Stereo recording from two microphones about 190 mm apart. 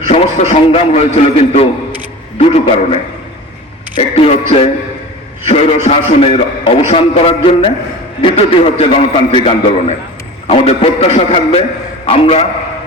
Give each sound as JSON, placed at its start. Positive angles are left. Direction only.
{"t": 0.1, "sound": "a man's voice", "side_deg": 30}